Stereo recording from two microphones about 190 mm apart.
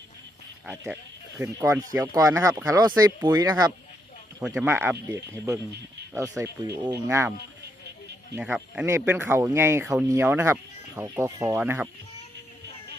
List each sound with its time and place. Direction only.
0.6 s speech: 10° right (ahead or behind)
4.4 s speech: 10° right (ahead or behind)
8.4 s speech: 5° right (ahead or behind)